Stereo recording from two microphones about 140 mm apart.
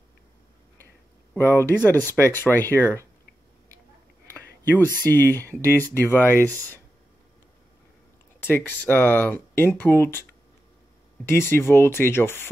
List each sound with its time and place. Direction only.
1.4 s speech: 15° left (ahead or behind)
4.6 s speech: 15° left (ahead or behind)
8.4 s speech: 15° left (ahead or behind)
11.2 s speech: 15° left (ahead or behind)